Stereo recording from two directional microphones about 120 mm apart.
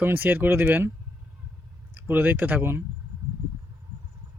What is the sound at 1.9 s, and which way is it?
Speech, 15° right (ahead or behind).